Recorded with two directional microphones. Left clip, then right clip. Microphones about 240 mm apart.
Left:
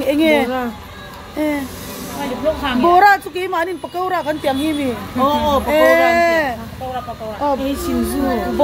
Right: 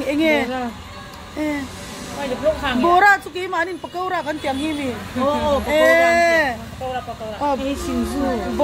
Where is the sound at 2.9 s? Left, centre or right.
Centre.